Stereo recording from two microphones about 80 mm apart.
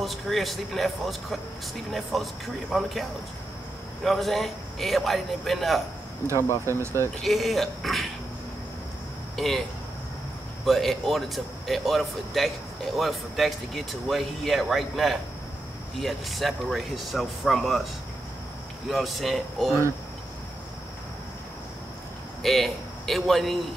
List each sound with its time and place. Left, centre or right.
0.0 s speech: centre
6.3 s speech: left
6.7 s speech: right
7.2 s speech: centre
10.6 s speech: centre
18.9 s speech: centre
22.4 s a man's voice: centre